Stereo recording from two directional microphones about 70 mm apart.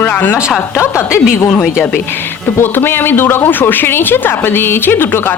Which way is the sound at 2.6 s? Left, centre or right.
Left.